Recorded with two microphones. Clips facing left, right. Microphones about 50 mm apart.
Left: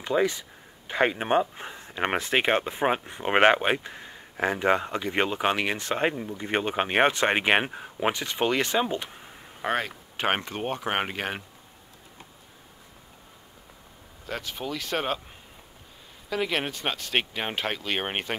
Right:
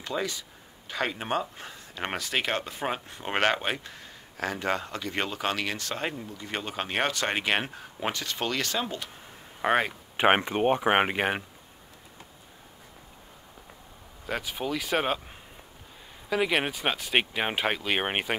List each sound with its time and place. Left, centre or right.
0.0 s speech: left
9.6 s speech: centre
14.2 s speech: centre
16.3 s speech: centre